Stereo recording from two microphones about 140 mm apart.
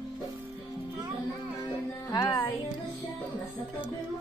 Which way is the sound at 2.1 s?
25° left (ahead or behind).